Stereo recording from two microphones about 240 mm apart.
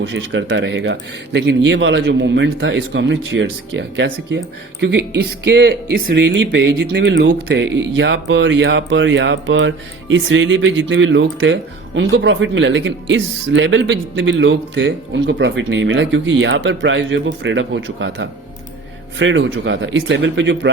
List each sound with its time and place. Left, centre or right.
0.0 s speech: right